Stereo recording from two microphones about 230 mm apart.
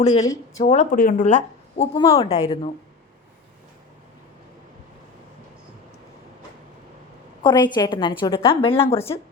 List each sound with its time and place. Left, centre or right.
0.0 s speech: left
2.0 s a woman's voice: left
7.4 s a woman's voice: centre